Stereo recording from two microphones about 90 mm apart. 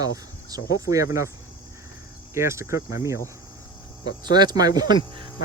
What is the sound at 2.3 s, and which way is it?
Cricket, 30° right (ahead or behind).